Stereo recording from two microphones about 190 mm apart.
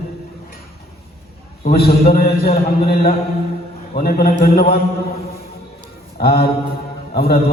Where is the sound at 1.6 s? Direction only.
55° left (ahead or behind).